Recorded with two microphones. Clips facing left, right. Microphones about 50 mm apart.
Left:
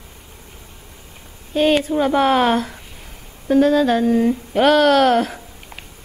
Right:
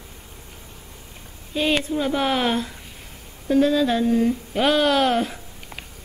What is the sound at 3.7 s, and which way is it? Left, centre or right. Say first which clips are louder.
Speech: left 4 dB; left.